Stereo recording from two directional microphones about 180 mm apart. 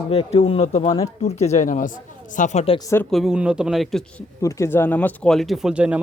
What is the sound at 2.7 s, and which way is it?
Speech, 15° left (ahead or behind).